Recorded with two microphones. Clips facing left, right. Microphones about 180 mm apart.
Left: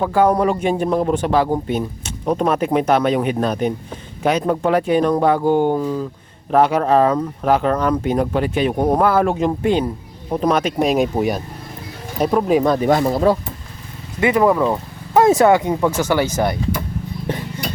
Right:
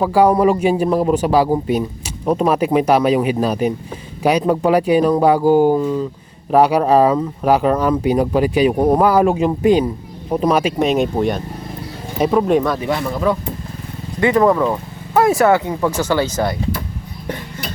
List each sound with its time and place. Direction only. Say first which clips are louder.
0.0 s speech: right 3 dB; 10° right (ahead or behind)
10.8 s speech: right 1 dB; 5° left (ahead or behind)
12.8 s speech: left 4 dB; 40° left (ahead or behind)
14.3 s speech: right 1 dB; 10° left (ahead or behind)
15.1 s speech: left 1 dB; 20° left (ahead or behind)